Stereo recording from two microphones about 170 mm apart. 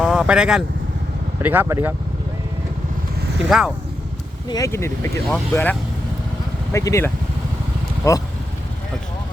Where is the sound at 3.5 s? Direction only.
Centre (ahead or behind).